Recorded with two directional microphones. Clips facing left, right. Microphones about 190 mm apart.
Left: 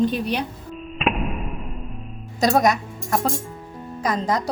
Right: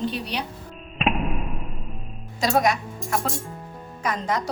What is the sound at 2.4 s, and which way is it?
A woman's voice, 40° left (ahead or behind).